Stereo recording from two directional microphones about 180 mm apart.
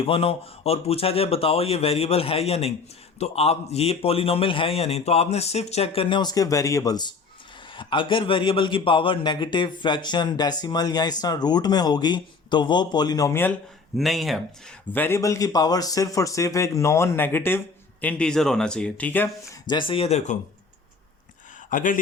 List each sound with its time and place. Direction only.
0.0 s a man's voice: 30° left (ahead or behind); by 13.6 s 10° left (ahead or behind)
13.9 s speech: centre (ahead or behind)
14.9 s a man's voice: 15° left (ahead or behind)
19.6 s a man's voice: 25° left (ahead or behind)
21.7 s speech: 45° left (ahead or behind)